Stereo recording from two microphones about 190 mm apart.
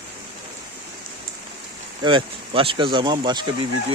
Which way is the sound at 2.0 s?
25° right (ahead or behind).